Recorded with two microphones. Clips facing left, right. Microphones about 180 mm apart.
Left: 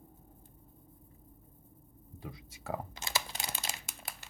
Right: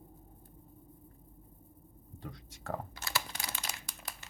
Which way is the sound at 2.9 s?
20° left (ahead or behind).